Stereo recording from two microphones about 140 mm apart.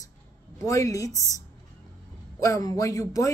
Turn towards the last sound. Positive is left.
turn(degrees=25)  # may be behind; listen again after turning